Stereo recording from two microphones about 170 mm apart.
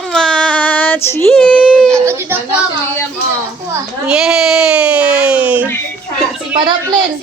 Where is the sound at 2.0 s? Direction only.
15° right (ahead or behind).